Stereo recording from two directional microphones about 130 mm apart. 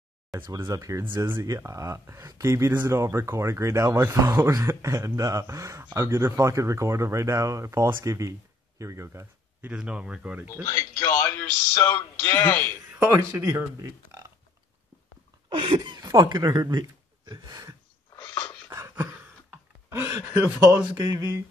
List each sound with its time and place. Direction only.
0.7 s speech: 25° right (ahead or behind)
9.7 s speech: 10° right (ahead or behind)
10.6 s a man's voice: 20° left (ahead or behind)
13.0 s speech: 20° right (ahead or behind)
15.6 s speech: 40° right (ahead or behind)
17.3 s a sound: 30° right (ahead or behind)
18.1 s dog: 30° left (ahead or behind)
18.7 s a sound: 20° right (ahead or behind)
20.5 s speech: 15° right (ahead or behind)